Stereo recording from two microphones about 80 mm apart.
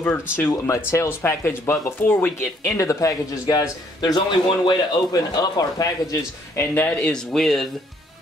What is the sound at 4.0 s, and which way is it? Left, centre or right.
A man's voice, left.